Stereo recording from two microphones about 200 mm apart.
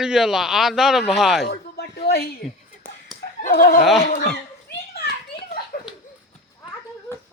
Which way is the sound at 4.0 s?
45° left (ahead or behind).